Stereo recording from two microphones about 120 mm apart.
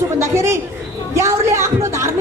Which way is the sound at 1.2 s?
25° right (ahead or behind).